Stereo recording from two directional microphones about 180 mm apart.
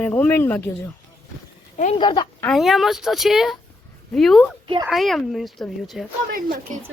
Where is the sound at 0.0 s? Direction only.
10° left (ahead or behind).